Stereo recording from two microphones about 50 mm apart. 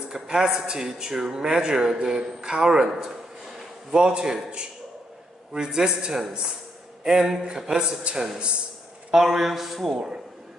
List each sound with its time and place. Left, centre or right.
0.1 s a man's voice: centre